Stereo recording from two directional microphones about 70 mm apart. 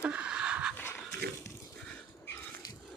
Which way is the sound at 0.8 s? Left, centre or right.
Left.